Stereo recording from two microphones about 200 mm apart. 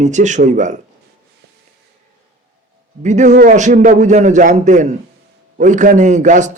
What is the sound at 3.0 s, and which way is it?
A man's voice, 35° right (ahead or behind).